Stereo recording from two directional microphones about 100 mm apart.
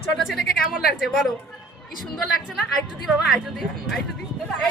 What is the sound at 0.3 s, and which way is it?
Speech, 5° right (ahead or behind).